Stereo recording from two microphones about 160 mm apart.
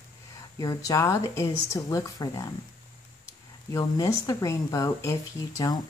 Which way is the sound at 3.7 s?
20° left (ahead or behind).